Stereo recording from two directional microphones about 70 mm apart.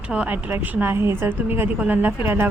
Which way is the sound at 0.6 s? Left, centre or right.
Right.